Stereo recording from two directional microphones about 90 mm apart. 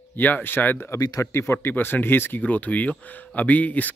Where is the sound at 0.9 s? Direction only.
40° left (ahead or behind).